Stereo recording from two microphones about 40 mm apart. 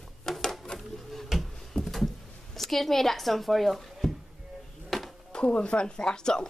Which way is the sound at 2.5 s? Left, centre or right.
Centre.